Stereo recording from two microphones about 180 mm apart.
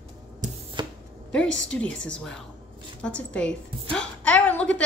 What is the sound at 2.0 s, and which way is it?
A woman's voice, 5° left (ahead or behind).